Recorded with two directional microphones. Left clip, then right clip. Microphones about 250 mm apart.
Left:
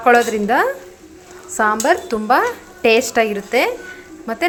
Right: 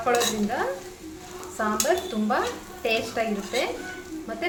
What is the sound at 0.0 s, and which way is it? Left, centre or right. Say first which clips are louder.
A woman's voice: left 10 dB; left.